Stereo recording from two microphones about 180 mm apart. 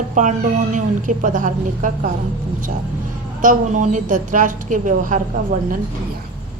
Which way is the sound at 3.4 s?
45° right (ahead or behind).